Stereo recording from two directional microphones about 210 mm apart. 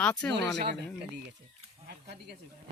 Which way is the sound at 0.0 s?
5° left (ahead or behind).